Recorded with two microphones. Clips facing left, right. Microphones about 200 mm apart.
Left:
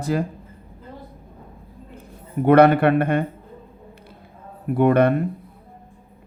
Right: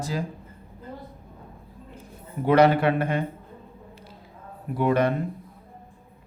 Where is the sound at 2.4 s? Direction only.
60° left (ahead or behind).